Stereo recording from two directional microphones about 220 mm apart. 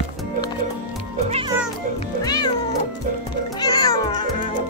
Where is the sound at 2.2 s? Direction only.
20° left (ahead or behind).